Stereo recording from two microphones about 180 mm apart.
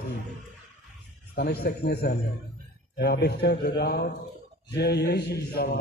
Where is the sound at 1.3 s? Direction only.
65° left (ahead or behind).